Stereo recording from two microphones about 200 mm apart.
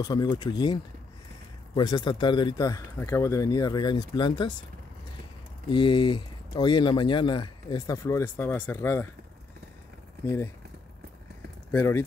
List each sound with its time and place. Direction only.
0.0 s speech: 20° left (ahead or behind)
1.8 s speech: 20° left (ahead or behind)
5.7 s speech: 25° left (ahead or behind)
11.7 s speech: 10° left (ahead or behind)